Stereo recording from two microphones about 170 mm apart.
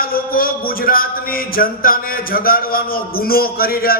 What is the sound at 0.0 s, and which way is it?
Speech, 60° left (ahead or behind).